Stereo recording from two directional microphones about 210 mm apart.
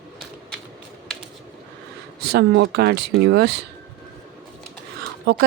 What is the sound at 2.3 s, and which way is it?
A woman's voice, 55° right (ahead or behind).